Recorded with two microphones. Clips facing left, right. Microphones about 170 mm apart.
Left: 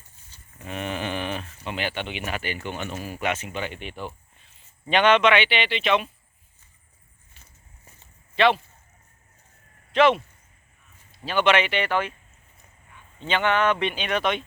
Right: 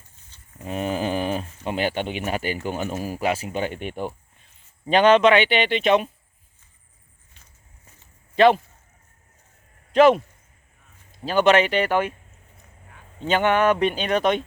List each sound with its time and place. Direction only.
0.6 s speech: 35° right (ahead or behind)
4.9 s speech: 35° right (ahead or behind)
8.4 s speech: 45° right (ahead or behind)
9.9 s speech: 40° right (ahead or behind)
11.3 s speech: 40° right (ahead or behind)
13.1 s speech: 40° right (ahead or behind)
13.4 s speech: 10° right (ahead or behind)
13.7 s speech: 40° right (ahead or behind)